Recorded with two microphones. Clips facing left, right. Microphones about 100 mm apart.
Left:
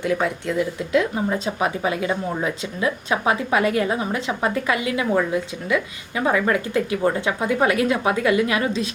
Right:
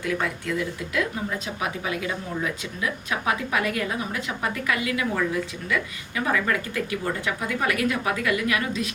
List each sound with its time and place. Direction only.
0.0 s speech: 25° left (ahead or behind)